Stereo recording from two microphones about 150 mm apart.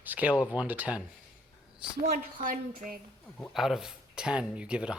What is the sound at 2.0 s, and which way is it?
Speech, 65° right (ahead or behind).